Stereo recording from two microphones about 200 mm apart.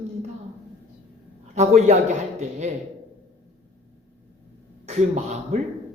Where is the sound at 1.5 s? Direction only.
35° right (ahead or behind).